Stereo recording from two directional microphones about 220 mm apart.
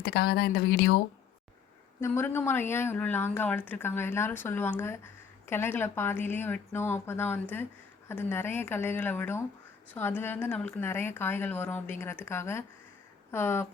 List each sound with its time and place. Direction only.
0.0 s speech: 45° left (ahead or behind)
2.0 s speech: 10° left (ahead or behind)